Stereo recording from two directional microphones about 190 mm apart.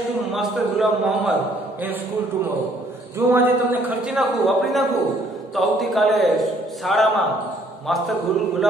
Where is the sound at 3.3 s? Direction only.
10° right (ahead or behind).